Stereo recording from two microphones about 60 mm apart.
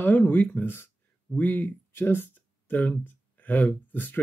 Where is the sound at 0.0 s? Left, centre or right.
Left.